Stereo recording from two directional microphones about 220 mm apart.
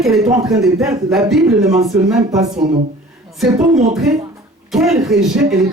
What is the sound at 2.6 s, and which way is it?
Speech, 20° right (ahead or behind).